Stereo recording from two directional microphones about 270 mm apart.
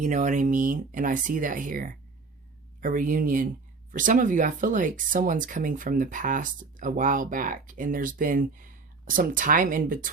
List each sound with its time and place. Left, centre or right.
0.0 s speech: right